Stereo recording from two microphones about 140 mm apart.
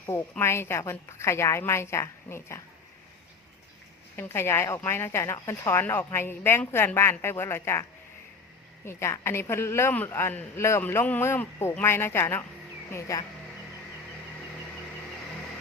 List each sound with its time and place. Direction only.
0.0 s a woman's voice: 20° left (ahead or behind)
4.2 s a woman's voice: 20° left (ahead or behind)